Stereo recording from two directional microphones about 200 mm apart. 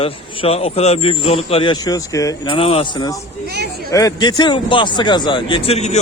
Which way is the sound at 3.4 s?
55° right (ahead or behind).